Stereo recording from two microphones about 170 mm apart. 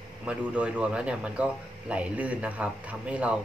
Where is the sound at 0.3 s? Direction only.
5° right (ahead or behind).